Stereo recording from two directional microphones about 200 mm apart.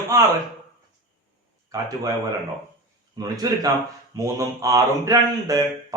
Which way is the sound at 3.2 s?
15° right (ahead or behind).